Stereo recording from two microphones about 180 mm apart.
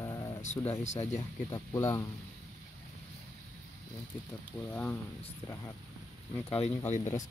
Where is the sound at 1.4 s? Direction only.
15° left (ahead or behind).